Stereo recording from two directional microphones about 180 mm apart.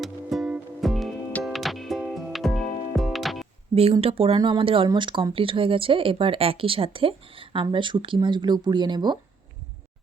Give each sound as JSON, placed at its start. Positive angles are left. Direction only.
{"t": 0.0, "sound": "music", "side_deg": 0}
{"t": 3.9, "sound": "speech", "side_deg": -30}